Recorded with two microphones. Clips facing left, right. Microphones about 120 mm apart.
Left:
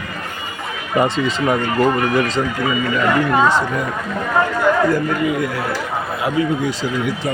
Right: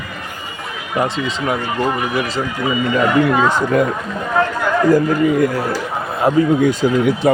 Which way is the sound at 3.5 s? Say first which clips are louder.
Right 3 dB; 45° right (ahead or behind).